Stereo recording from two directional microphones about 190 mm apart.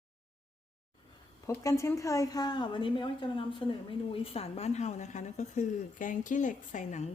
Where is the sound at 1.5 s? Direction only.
15° left (ahead or behind).